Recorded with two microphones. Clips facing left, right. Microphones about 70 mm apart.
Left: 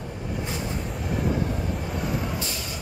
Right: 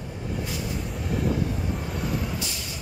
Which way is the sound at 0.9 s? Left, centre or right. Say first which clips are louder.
Right 1 dB; centre.